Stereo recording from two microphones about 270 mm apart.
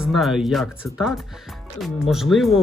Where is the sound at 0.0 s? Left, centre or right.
Centre.